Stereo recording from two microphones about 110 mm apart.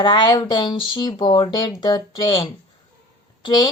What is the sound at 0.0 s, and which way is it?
A woman's voice, 45° left (ahead or behind).